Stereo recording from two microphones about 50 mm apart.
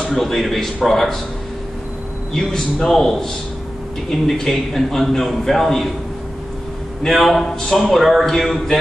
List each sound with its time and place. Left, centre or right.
0.0 s a man's voice: centre
2.3 s a man's voice: centre
7.1 s a man's voice: centre